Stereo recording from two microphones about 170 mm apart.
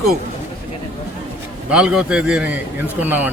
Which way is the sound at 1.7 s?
5° right (ahead or behind).